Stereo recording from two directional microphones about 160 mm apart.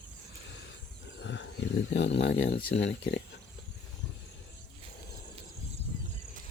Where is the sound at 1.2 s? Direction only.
90° left.